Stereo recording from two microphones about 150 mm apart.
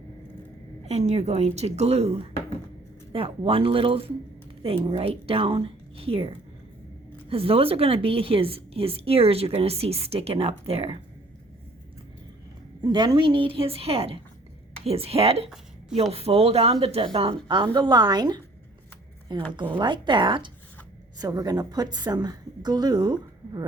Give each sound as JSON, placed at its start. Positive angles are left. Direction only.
{"t": 0.9, "sound": "a woman's voice", "side_deg": -45}
{"t": 12.9, "sound": "a woman's voice", "side_deg": -30}